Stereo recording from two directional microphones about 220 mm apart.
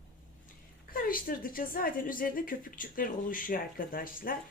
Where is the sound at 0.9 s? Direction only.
40° left (ahead or behind).